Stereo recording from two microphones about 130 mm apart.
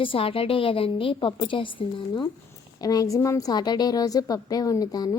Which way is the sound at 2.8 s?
25° left (ahead or behind).